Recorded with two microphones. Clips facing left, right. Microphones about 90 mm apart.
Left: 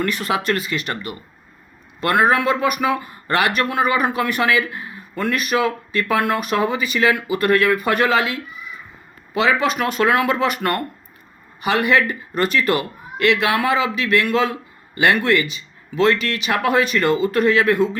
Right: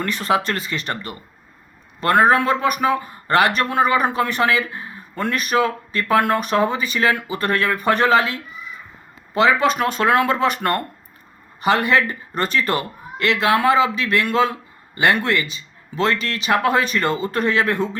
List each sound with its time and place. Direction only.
0.0 s a man's voice: 30° right (ahead or behind)
16.5 s a man's voice: 25° right (ahead or behind)